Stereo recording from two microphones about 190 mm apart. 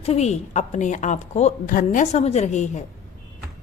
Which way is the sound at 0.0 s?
35° left (ahead or behind).